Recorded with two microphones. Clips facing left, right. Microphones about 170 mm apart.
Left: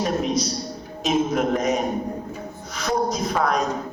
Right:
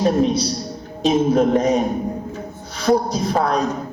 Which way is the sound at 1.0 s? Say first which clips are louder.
Right 6 dB; 30° right (ahead or behind).